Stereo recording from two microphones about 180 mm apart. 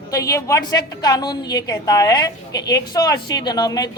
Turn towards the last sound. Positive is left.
turn(degrees=20)  # may be behind; listen again after turning